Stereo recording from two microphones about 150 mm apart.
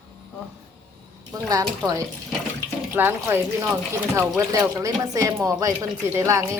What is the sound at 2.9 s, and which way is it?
Speech, 15° right (ahead or behind).